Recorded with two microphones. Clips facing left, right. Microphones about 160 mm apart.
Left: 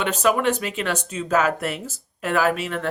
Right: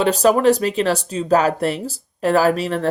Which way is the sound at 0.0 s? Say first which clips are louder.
Right 6 dB; 35° right (ahead or behind).